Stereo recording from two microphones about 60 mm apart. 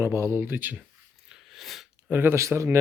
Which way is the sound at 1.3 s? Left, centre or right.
Centre.